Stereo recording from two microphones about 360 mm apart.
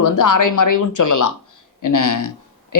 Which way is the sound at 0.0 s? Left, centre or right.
Left.